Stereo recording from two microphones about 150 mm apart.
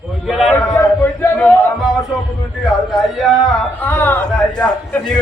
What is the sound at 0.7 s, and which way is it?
Speech, 15° left (ahead or behind).